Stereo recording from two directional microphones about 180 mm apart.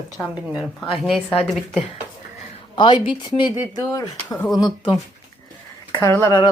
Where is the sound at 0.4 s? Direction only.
5° right (ahead or behind).